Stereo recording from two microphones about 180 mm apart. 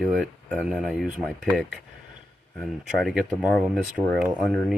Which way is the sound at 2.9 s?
Centre (ahead or behind).